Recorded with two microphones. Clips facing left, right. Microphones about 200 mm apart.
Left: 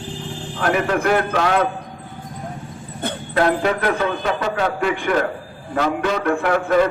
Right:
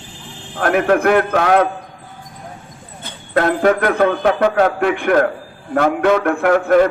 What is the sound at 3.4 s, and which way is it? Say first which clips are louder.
A man's voice: right 4 dB; 45° right (ahead or behind).